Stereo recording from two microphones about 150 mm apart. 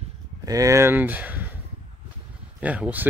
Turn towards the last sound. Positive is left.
turn(degrees=-10)  # may be behind; listen again after turning